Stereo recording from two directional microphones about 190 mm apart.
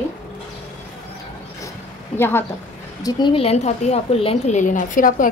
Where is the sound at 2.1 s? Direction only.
10° left (ahead or behind).